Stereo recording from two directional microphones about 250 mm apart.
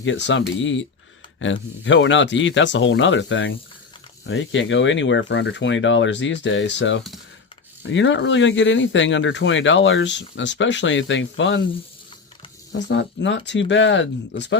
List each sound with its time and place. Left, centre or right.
0.0 s speech: left
12.9 s speech: left